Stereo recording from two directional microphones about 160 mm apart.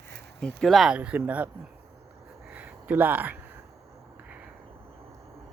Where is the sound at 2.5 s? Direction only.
10° right (ahead or behind).